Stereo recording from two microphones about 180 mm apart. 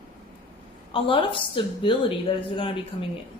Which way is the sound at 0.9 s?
30° left (ahead or behind).